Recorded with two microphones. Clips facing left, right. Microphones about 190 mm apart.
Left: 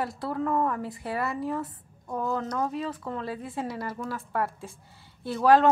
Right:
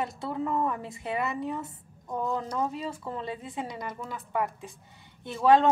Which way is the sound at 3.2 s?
20° right (ahead or behind).